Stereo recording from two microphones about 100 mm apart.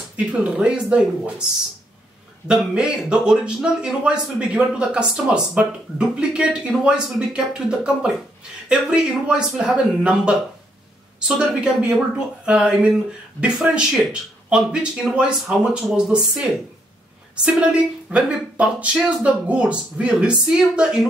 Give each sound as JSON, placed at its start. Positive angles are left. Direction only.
{"t": 0.1, "sound": "a man's voice", "side_deg": -15}
{"t": 2.4, "sound": "a man's voice", "side_deg": -10}
{"t": 18.1, "sound": "a man's voice", "side_deg": -15}